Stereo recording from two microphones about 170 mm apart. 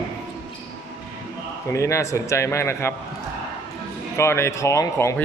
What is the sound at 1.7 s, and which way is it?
A man's voice, 15° left (ahead or behind).